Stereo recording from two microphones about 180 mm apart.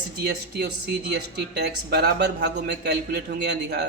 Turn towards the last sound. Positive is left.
turn(degrees=-70)  # may be behind; listen again after turning